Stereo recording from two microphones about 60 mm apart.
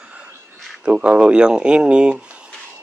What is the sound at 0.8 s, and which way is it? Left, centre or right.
Speech, right.